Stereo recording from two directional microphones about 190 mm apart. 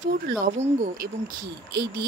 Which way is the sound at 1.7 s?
55° right (ahead or behind).